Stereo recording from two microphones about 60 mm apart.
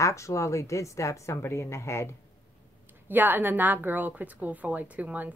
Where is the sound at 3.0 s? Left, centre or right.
Right.